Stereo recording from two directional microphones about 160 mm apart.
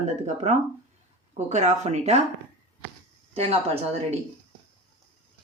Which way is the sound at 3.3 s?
35° right (ahead or behind).